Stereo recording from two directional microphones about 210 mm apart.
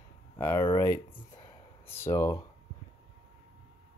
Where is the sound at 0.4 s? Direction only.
20° left (ahead or behind).